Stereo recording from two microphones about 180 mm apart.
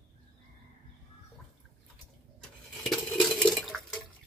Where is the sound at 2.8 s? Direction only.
Centre (ahead or behind).